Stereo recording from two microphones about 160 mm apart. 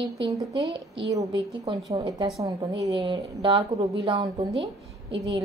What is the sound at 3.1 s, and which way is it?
A woman's voice, 35° right (ahead or behind).